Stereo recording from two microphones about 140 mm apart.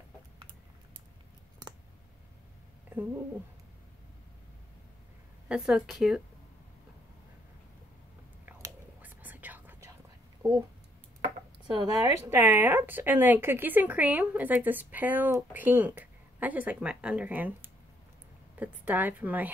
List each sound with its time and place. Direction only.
5.5 s a woman's voice: 5° right (ahead or behind)
8.5 s whispering: 15° right (ahead or behind)
11.6 s speech: 25° right (ahead or behind)
12.3 s a woman's voice: 15° right (ahead or behind)